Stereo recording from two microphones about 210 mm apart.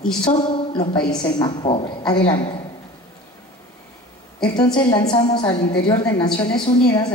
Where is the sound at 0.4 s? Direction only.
20° left (ahead or behind).